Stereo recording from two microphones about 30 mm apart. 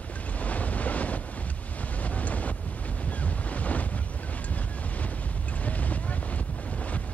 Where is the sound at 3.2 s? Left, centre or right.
Left.